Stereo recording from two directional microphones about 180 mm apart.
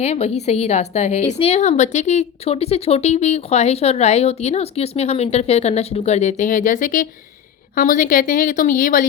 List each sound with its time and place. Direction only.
0.0 s a woman's voice: 35° left (ahead or behind); by 9.0 s 50° left (ahead or behind)